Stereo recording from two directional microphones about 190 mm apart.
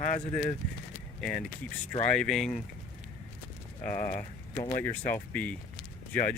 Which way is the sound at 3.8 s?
10° left (ahead or behind).